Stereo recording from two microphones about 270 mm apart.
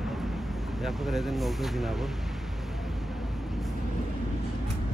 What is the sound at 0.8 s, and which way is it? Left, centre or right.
Speech, centre.